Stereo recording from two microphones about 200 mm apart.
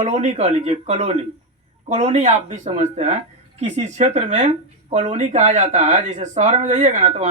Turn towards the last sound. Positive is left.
turn(degrees=-35)  # may be behind; listen again after turning